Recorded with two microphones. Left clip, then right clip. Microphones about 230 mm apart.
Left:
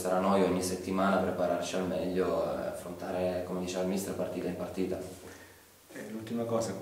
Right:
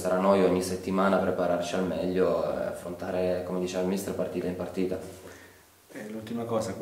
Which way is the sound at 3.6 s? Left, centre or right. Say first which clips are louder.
Right 4 dB; right.